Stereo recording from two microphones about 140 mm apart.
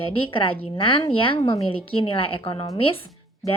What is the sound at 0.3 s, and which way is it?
A woman's voice, 40° left (ahead or behind).